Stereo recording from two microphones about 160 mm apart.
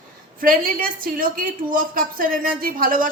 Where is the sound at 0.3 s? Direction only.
60° right (ahead or behind).